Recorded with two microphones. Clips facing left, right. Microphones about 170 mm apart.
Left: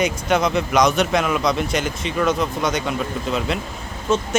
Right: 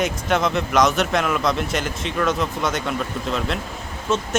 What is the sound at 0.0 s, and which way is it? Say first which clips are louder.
Speech: left 2 dB; centre (ahead or behind).